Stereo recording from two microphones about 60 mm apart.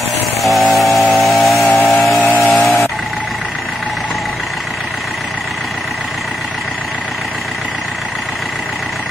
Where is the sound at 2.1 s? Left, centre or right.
Left.